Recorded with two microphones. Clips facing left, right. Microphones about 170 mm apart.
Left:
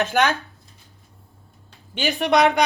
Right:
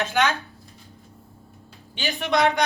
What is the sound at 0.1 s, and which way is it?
Speech, 60° left (ahead or behind).